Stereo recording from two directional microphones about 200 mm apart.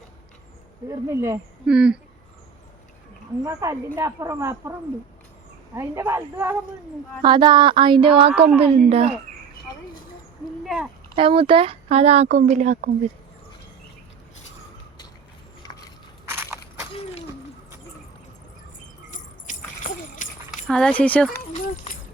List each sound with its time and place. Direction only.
0.9 s speech: 15° right (ahead or behind)
3.4 s speech: 15° right (ahead or behind)
5.7 s speech: 15° right (ahead or behind)
11.1 s speech: 25° right (ahead or behind)
15.6 s a sound: 15° left (ahead or behind)
16.3 s crushing: 10° right (ahead or behind)
19.1 s a sound: 40° left (ahead or behind)
20.7 s speech: 5° left (ahead or behind)